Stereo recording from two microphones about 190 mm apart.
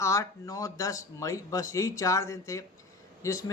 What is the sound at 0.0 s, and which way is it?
Speech, 15° left (ahead or behind).